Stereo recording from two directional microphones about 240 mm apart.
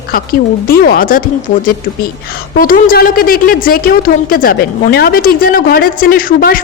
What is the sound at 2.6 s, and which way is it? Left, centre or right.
A woman's voice, left.